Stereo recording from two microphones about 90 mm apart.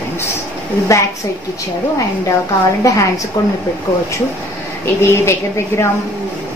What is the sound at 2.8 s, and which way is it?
Speech, 35° left (ahead or behind).